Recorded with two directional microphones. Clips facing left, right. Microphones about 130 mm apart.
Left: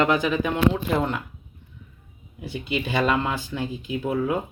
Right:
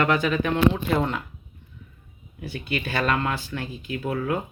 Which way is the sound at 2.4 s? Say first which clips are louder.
Left 2 dB; 15° left (ahead or behind).